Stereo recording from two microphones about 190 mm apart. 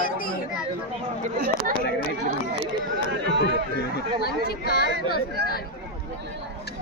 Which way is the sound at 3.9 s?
55° left (ahead or behind).